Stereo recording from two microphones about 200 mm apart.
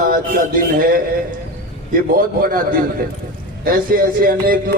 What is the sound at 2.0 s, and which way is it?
Speech, 45° right (ahead or behind).